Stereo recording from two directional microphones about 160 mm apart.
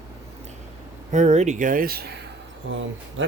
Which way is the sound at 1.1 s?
45° right (ahead or behind).